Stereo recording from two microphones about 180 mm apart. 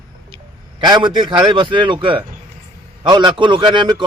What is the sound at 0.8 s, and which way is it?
A man's voice, 25° right (ahead or behind).